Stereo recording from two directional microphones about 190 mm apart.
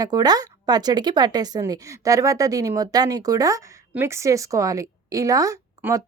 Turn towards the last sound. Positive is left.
turn(degrees=-15)  # may be behind; listen again after turning